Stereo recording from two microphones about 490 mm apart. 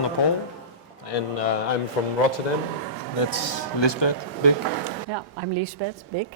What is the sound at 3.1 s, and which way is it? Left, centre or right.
Speech, left.